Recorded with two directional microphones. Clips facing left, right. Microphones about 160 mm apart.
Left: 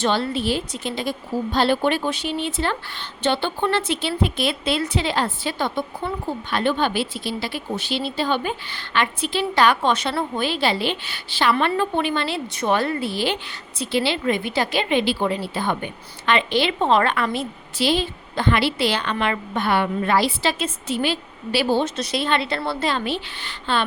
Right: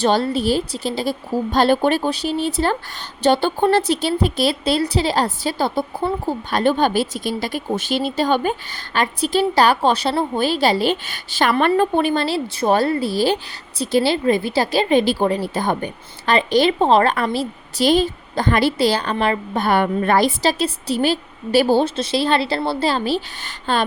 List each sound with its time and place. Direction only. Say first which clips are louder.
0.0 s a woman's voice: right 4 dB; 40° right (ahead or behind)